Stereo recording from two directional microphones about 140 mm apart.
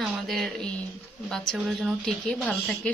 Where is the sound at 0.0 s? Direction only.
Centre (ahead or behind).